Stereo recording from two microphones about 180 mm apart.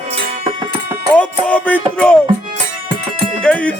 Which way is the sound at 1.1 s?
5° left (ahead or behind).